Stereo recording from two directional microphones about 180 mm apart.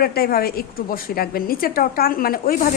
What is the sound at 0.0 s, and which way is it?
A woman's voice, 60° left (ahead or behind).